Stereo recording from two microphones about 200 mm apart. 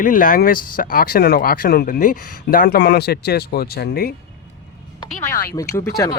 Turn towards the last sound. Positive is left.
turn(degrees=15)  # may be behind; listen again after turning